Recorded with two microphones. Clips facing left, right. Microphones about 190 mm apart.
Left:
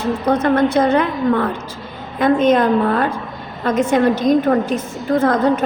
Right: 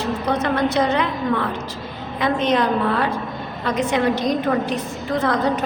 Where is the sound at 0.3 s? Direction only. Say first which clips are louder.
Left 6 dB; 50° left (ahead or behind).